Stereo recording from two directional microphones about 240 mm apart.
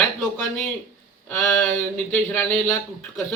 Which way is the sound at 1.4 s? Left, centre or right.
Centre.